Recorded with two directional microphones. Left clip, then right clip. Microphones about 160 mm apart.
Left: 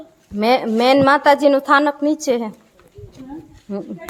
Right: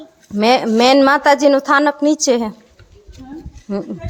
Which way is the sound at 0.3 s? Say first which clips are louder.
Right 3 dB; 20° right (ahead or behind).